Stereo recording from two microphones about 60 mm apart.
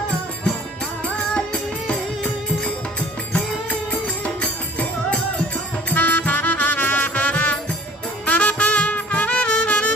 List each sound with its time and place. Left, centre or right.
3.3 s music: left
5.9 s music: left